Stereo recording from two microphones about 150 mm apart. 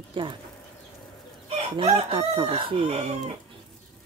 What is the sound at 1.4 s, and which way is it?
A woman's voice, 40° right (ahead or behind).